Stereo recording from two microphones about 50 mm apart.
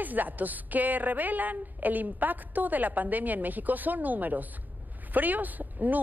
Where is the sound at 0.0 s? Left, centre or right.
Right.